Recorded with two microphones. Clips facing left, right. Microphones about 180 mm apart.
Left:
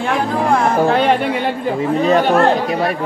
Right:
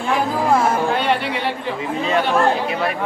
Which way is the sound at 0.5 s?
5° right (ahead or behind).